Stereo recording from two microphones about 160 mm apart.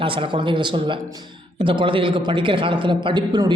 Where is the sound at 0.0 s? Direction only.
35° right (ahead or behind).